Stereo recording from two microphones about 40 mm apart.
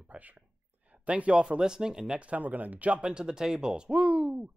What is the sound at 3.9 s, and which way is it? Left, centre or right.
Speech, right.